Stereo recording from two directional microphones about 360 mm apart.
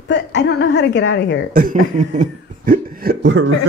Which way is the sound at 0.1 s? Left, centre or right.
Left.